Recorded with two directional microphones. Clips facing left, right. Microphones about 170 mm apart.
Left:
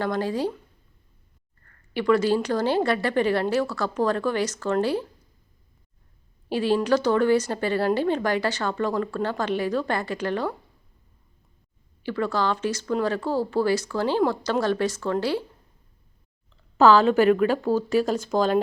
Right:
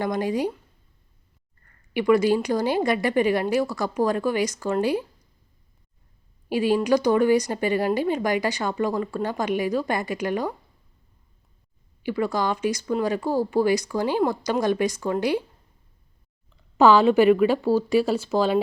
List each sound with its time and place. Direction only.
0.0 s a woman's voice: 15° right (ahead or behind)
1.9 s a woman's voice: 15° right (ahead or behind)
6.5 s a woman's voice: 10° right (ahead or behind)
12.0 s a woman's voice: 10° right (ahead or behind)
16.7 s a woman's voice: 10° right (ahead or behind)